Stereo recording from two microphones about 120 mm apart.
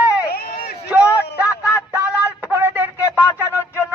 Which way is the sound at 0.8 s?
10° right (ahead or behind).